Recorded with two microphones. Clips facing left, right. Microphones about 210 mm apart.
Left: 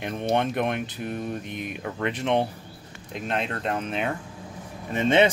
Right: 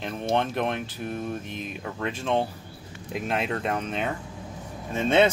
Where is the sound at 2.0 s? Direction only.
20° left (ahead or behind).